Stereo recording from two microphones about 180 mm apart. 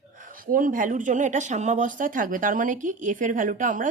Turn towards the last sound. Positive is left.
turn(degrees=-45)  # may be behind; listen again after turning